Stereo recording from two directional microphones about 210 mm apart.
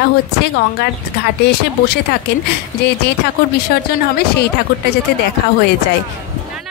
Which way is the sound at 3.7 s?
50° left (ahead or behind).